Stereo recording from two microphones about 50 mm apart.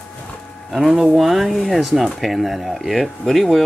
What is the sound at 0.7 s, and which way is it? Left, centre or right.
Speech, centre.